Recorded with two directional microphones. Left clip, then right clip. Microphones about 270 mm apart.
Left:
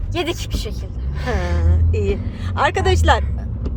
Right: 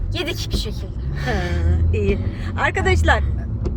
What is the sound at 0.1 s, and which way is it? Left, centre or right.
Speech, centre.